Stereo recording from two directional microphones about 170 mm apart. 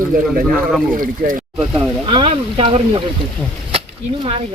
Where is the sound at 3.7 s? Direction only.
35° right (ahead or behind).